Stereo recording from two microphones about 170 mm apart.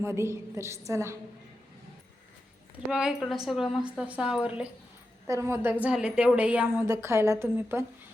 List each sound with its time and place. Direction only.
0.0 s a woman's voice: 15° right (ahead or behind)
2.7 s a woman's voice: 5° right (ahead or behind)